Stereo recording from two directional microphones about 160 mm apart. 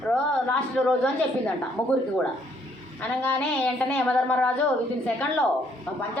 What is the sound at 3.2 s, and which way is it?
A woman's voice, 10° left (ahead or behind).